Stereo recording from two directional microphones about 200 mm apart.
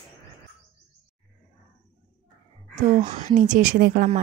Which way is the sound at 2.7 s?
35° right (ahead or behind).